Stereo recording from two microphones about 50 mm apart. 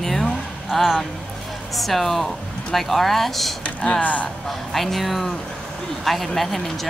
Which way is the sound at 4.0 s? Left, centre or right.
Left.